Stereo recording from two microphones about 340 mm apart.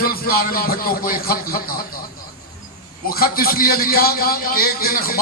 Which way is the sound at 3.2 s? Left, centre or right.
Left.